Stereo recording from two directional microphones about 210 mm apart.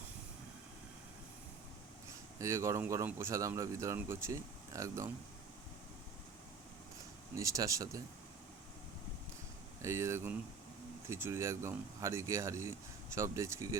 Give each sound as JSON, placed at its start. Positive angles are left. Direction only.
{"t": 2.4, "sound": "speech", "side_deg": -15}
{"t": 7.3, "sound": "speech", "side_deg": -15}
{"t": 9.8, "sound": "speech", "side_deg": -15}